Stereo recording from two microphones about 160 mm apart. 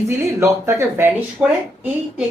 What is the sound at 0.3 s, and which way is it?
Speech, 15° right (ahead or behind).